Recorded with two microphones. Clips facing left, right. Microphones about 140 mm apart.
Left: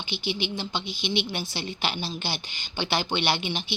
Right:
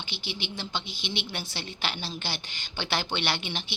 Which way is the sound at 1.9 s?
5° left (ahead or behind).